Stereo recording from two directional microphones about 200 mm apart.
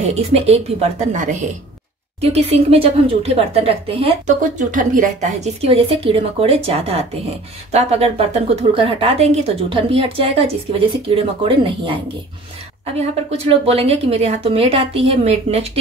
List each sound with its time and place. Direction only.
0.1 s a woman's voice: 30° right (ahead or behind)
4.4 s a woman's voice: 40° right (ahead or behind); by 12.0 s 25° right (ahead or behind)
13.5 s a woman's voice: 30° right (ahead or behind)